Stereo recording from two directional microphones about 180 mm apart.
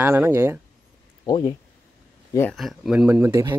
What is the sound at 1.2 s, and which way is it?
Speech, 25° left (ahead or behind).